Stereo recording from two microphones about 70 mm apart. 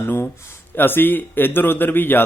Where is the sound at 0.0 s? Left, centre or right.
Left.